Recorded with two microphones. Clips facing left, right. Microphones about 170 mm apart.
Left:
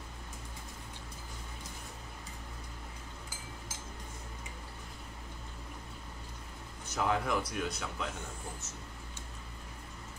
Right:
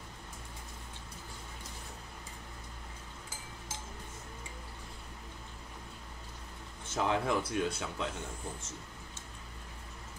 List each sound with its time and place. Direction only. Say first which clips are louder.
6.9 s speech: right 1 dB; 25° right (ahead or behind)